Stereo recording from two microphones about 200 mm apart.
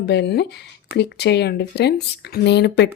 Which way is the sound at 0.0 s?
55° left (ahead or behind).